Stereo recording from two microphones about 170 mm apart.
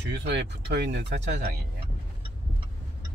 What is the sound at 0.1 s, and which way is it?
Speech, 85° right.